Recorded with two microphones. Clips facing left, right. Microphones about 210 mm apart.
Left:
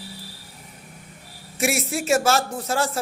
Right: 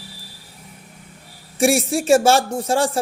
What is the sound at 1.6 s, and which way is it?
A woman's voice, 30° right (ahead or behind).